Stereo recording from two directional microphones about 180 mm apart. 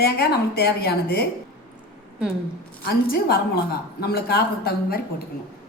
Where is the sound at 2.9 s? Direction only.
60° left (ahead or behind).